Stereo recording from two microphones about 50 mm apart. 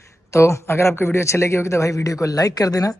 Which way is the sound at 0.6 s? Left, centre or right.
Left.